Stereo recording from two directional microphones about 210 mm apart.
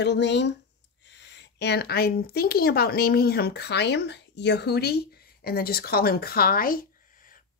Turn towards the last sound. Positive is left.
turn(degrees=45)  # may be behind; listen again after turning